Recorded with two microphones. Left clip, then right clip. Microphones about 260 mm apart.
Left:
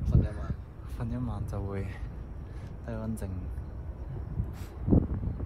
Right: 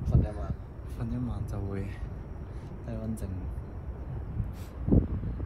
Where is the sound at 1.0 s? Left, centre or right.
Centre.